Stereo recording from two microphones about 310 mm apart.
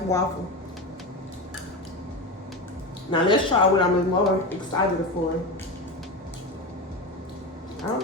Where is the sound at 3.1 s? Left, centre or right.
Centre.